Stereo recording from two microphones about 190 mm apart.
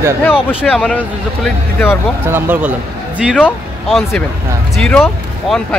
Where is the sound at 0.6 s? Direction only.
5° left (ahead or behind).